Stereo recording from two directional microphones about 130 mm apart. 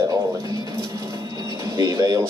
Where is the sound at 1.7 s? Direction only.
25° right (ahead or behind).